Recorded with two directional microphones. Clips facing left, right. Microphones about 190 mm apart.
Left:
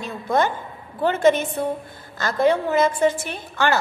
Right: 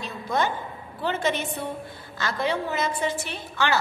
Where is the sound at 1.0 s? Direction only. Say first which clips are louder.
Left 8 dB; 50° left (ahead or behind).